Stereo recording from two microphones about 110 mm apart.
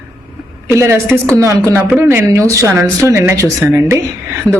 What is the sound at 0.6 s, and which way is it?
A woman's voice, 25° right (ahead or behind).